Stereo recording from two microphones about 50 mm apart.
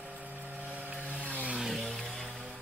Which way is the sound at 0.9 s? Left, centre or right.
Right.